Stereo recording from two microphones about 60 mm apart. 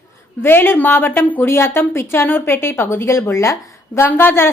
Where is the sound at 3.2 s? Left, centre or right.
Left.